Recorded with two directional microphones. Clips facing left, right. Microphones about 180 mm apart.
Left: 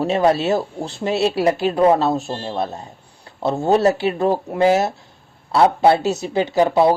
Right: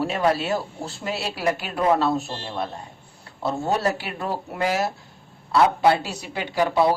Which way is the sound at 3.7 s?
25° left (ahead or behind).